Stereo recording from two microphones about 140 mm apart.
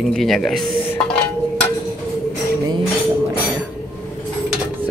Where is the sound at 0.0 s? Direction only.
Centre (ahead or behind).